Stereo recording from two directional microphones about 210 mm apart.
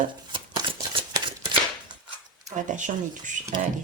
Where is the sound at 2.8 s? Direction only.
35° right (ahead or behind).